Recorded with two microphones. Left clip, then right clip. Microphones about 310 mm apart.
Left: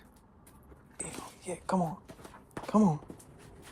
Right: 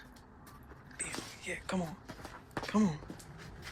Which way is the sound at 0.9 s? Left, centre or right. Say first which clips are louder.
Right 1 dB; centre.